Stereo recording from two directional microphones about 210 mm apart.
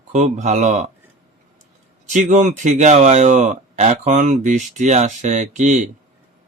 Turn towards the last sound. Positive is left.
turn(degrees=-35)  # may be behind; listen again after turning